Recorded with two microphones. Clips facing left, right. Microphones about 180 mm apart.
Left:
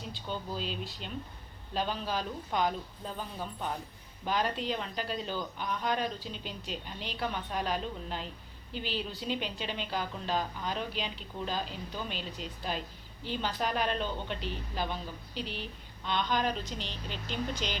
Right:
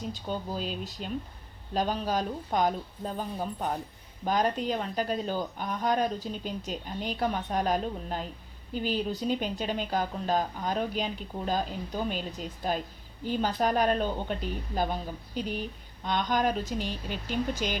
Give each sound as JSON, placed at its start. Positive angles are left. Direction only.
{"t": 0.1, "sound": "a woman's voice", "side_deg": -45}